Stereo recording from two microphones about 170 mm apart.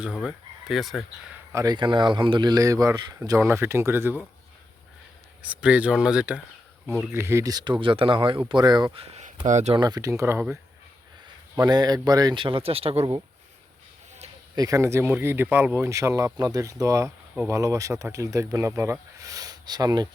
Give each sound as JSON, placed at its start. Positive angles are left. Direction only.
{"t": 0.0, "sound": "fowl", "side_deg": 0}
{"t": 1.5, "sound": "speech", "side_deg": -25}
{"t": 5.4, "sound": "speech", "side_deg": -5}
{"t": 9.5, "sound": "speech", "side_deg": -45}
{"t": 9.7, "sound": "speech", "side_deg": -25}
{"t": 11.6, "sound": "speech", "side_deg": -25}
{"t": 14.5, "sound": "speech", "side_deg": -20}